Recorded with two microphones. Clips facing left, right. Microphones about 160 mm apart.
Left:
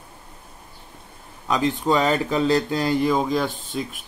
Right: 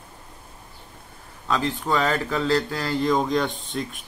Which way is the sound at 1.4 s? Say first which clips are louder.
Left 4 dB; 20° left (ahead or behind).